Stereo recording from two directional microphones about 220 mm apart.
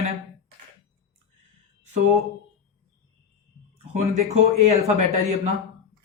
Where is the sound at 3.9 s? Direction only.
30° right (ahead or behind).